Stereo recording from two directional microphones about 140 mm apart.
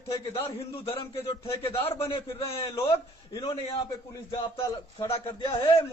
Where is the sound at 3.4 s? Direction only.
35° left (ahead or behind).